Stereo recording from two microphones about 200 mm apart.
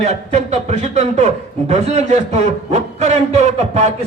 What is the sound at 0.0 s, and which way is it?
A man's voice, 35° right (ahead or behind).